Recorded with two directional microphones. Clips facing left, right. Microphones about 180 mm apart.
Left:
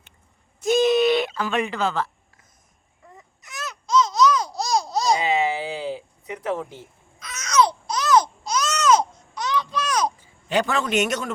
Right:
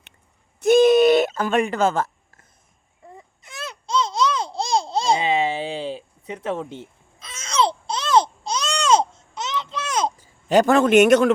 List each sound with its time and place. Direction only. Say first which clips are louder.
0.6 s a sound: right 5 dB; 55° right (ahead or behind)
3.1 s babbling: right 2 dB; 30° right (ahead or behind)
10.2 s a man's voice: right 6 dB; 45° right (ahead or behind); by 11.3 s 60° right (ahead or behind)